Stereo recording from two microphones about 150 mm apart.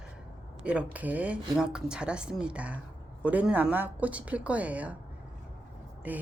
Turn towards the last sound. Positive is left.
turn(degrees=-10)  # may be behind; listen again after turning